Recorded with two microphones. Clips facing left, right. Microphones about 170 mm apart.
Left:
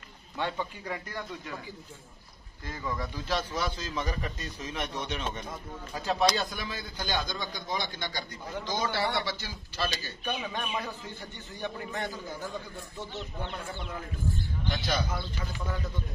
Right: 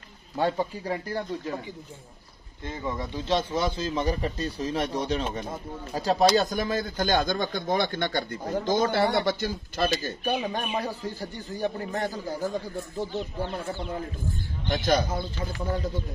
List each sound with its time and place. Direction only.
0.4 s a man's voice: 35° right (ahead or behind)
2.6 s a man's voice: 25° right (ahead or behind); by 9.8 s 50° right (ahead or behind)
10.4 s a man's voice: 40° right (ahead or behind)
15.3 s a man's voice: 30° right (ahead or behind)